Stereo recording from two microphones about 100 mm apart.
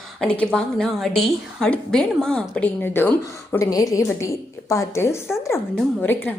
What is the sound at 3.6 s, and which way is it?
A woman's voice, 35° left (ahead or behind).